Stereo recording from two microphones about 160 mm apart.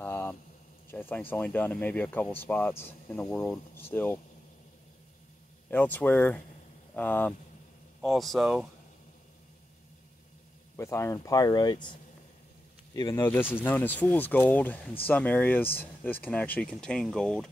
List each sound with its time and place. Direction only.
0.0 s a sound: 10° left (ahead or behind)
1.3 s speech: 10° left (ahead or behind)
5.7 s speech: 10° left (ahead or behind)
10.8 s speech: 15° left (ahead or behind)
12.9 s speech: 20° left (ahead or behind)